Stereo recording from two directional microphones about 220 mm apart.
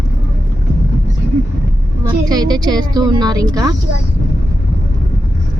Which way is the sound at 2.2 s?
20° right (ahead or behind).